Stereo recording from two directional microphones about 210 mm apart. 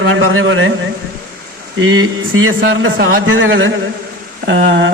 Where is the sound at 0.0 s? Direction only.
65° right (ahead or behind).